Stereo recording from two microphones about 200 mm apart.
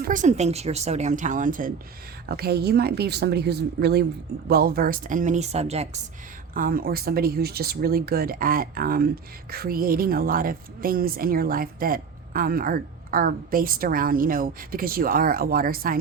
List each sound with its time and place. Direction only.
0.0 s speech: 40° right (ahead or behind)
2.3 s speech: 50° right (ahead or behind); by 6.0 s 30° right (ahead or behind)
6.5 s a woman's voice: 45° right (ahead or behind)